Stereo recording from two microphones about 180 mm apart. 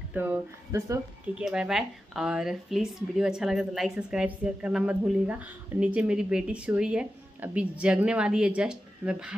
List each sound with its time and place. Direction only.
0.1 s speech: 10° right (ahead or behind)
1.4 s speech: 5° right (ahead or behind)